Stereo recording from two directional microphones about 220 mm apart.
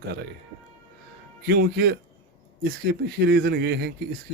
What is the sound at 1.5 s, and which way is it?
Speech, 45° right (ahead or behind).